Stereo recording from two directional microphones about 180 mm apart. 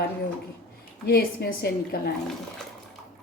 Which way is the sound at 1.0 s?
60° left (ahead or behind).